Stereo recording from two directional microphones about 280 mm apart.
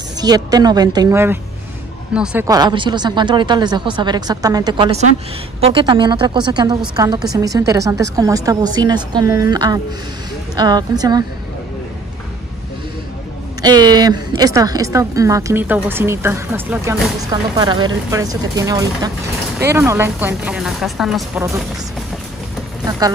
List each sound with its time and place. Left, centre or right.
0.2 s a woman's voice: centre
13.6 s a woman's voice: centre
22.8 s speech: centre